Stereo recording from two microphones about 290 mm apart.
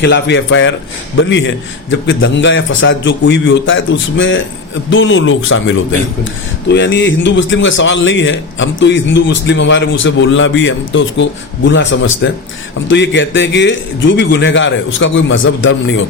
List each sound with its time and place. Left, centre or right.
0.0 s a man's voice: left